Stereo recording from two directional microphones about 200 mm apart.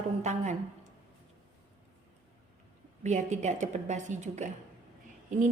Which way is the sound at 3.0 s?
35° right (ahead or behind).